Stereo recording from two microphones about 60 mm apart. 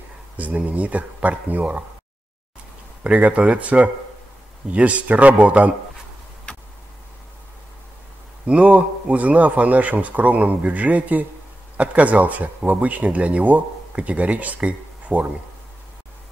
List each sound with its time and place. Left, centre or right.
0.4 s speech: right
3.0 s speech: right
8.5 s speech: right